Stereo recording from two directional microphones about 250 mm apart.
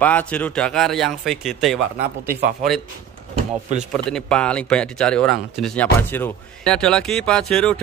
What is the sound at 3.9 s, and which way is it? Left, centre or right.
Speech, centre.